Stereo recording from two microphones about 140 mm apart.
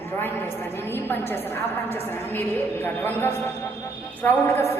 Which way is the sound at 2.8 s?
15° left (ahead or behind).